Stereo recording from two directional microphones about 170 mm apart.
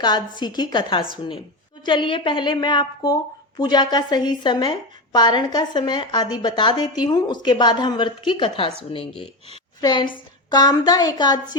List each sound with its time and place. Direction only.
0.0 s a woman's voice: 25° left (ahead or behind)